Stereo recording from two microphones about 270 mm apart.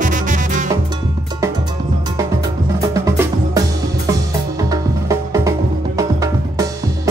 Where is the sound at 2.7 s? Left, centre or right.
Centre.